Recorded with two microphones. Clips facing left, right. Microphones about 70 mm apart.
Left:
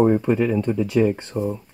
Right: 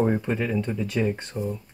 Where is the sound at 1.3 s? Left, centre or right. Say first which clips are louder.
Left 6 dB; left.